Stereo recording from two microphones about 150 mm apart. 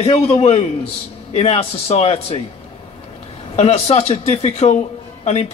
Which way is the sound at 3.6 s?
45° left (ahead or behind).